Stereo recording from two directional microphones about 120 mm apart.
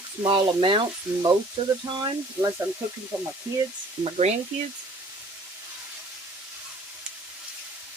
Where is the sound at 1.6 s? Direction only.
40° right (ahead or behind).